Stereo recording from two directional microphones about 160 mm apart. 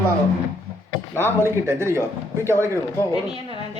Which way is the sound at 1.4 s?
15° right (ahead or behind).